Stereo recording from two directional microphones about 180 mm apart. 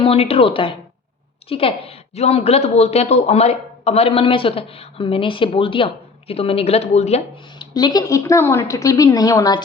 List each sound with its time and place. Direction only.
0.0 s a woman's voice: 35° left (ahead or behind)
7.6 s a woman's voice: 25° left (ahead or behind)